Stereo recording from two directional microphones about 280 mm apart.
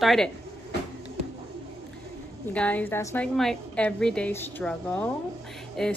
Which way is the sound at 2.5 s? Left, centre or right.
Centre.